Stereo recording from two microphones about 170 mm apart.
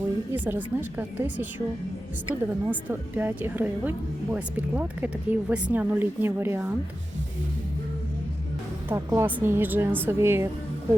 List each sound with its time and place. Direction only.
0.3 s a woman's voice: 10° right (ahead or behind)
8.9 s a woman's voice: 20° right (ahead or behind)